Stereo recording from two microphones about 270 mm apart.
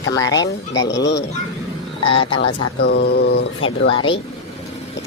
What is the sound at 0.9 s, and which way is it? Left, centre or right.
Speech, left.